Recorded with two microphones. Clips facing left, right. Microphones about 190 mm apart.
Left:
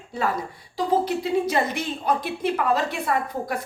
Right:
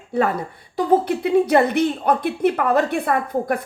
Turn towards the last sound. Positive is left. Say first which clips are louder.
# right 5 dB
turn(degrees=-55)  # may be behind; listen again after turning